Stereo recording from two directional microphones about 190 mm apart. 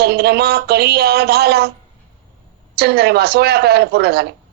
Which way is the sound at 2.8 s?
55° right (ahead or behind).